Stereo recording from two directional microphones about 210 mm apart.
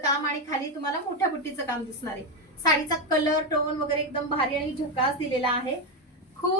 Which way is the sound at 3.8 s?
25° left (ahead or behind).